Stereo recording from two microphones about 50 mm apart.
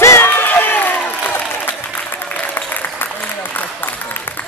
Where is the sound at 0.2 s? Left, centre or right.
Left.